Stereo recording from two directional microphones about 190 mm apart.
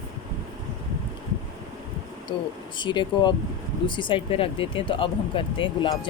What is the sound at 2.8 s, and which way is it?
Speech, 25° left (ahead or behind).